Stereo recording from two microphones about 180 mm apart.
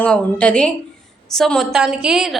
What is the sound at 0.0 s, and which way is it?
A woman's voice, 5° left (ahead or behind).